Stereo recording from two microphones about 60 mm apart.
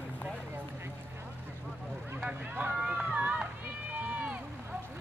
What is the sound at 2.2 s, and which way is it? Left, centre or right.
Run, right.